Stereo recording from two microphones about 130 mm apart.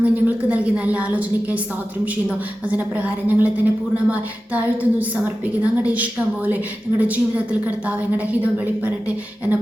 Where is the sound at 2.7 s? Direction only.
10° right (ahead or behind).